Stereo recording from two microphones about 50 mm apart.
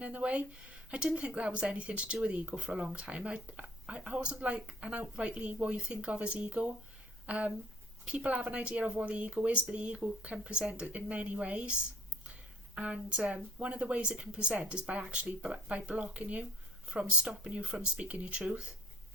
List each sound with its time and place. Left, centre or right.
0.0 s speech: right
12.2 s a sound: right
13.3 s speech: right